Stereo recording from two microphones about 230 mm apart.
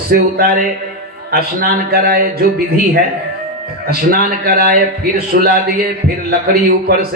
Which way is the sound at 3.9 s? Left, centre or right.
Right.